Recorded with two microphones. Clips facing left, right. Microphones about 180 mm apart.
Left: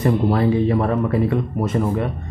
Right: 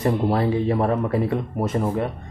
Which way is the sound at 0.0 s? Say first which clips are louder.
Left 3 dB; 35° right (ahead or behind).